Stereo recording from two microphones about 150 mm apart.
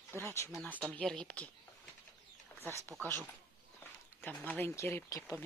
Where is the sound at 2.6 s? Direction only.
15° left (ahead or behind).